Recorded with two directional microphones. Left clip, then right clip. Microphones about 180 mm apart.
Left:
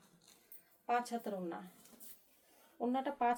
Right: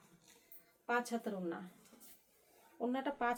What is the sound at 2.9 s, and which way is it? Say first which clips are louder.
Speech: left 3 dB; 25° right (ahead or behind).